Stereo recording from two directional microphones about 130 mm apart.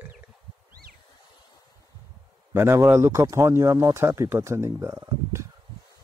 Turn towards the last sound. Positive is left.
turn(degrees=-20)  # may be behind; listen again after turning